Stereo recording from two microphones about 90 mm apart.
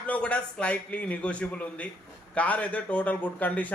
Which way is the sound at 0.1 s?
15° left (ahead or behind).